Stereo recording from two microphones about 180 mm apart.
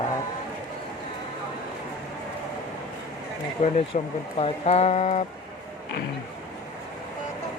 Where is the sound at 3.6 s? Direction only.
30° left (ahead or behind).